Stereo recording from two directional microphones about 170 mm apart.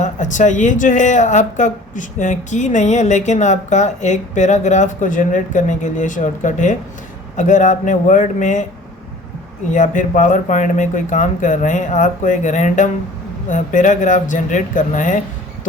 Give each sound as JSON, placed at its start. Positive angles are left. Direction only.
{"t": 0.0, "sound": "speech", "side_deg": 45}
{"t": 9.7, "sound": "speech", "side_deg": 50}